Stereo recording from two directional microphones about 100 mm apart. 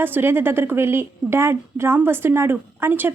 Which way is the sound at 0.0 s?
20° right (ahead or behind).